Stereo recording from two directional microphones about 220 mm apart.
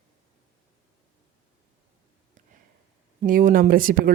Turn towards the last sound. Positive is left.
turn(degrees=-40)  # may be behind; listen again after turning